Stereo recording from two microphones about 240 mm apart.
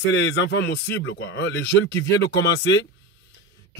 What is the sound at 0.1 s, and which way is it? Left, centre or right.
A man's voice, left.